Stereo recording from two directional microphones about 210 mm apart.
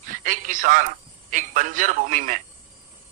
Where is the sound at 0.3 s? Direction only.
40° right (ahead or behind).